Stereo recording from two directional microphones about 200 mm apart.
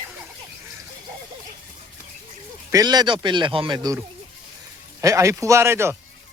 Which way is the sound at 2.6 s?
20° right (ahead or behind).